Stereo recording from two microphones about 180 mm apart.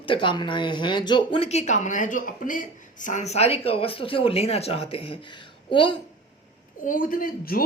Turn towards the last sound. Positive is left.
turn(degrees=55)  # may be behind; listen again after turning